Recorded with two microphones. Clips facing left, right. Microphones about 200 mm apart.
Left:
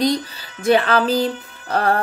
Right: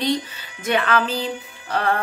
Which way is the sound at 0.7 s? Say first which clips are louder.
Left 5 dB; 35° left (ahead or behind).